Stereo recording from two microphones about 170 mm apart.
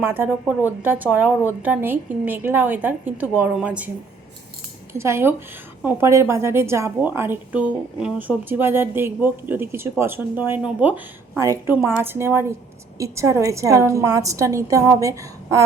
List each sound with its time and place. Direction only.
0.0 s a woman's voice: 15° right (ahead or behind)
4.9 s a woman's voice: 15° right (ahead or behind)